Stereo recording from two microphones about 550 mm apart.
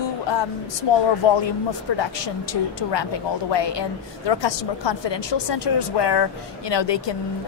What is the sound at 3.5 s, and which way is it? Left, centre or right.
A woman's voice, left.